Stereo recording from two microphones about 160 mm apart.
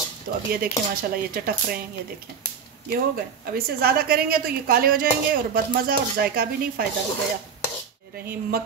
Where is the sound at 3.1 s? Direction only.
70° right (ahead or behind).